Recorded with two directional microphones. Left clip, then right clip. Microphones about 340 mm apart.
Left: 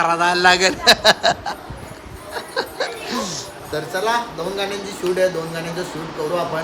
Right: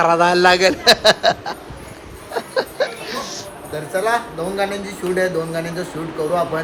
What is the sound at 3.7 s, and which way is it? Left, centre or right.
Speech, centre.